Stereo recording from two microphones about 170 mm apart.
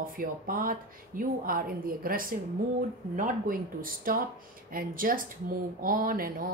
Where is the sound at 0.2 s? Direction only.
55° right (ahead or behind).